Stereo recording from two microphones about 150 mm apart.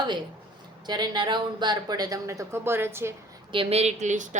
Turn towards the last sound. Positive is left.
turn(degrees=-55)  # may be behind; listen again after turning